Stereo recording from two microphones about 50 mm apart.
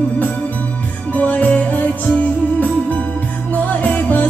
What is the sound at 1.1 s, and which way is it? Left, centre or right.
Music, left.